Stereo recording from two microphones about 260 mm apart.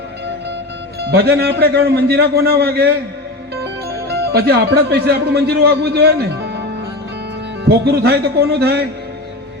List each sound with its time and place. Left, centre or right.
1.0 s a man's voice: right
4.1 s a man's voice: right